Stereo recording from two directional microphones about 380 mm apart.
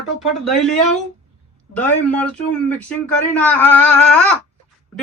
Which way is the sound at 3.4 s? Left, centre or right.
Centre.